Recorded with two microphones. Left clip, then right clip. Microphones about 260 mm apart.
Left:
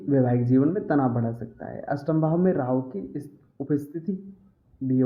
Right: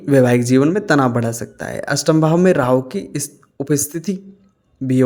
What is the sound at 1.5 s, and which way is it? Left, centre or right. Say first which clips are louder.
Speech: right 10 dB; right.